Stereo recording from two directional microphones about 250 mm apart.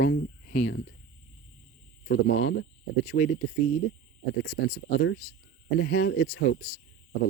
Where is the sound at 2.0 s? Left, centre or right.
Left.